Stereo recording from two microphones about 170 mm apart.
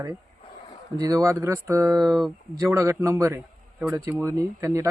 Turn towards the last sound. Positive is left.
turn(degrees=-20)  # may be behind; listen again after turning